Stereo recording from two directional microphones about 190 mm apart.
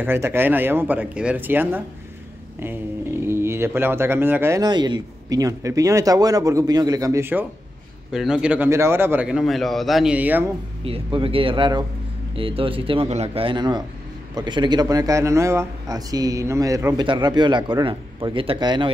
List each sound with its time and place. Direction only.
0.0 s a man's voice: 10° right (ahead or behind)
10.8 s a man's voice: 30° right (ahead or behind)